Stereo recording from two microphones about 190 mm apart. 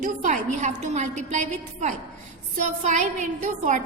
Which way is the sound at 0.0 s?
40° right (ahead or behind).